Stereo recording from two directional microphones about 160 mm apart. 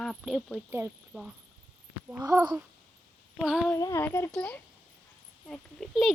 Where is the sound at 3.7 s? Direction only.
20° left (ahead or behind); by 6.1 s centre (ahead or behind).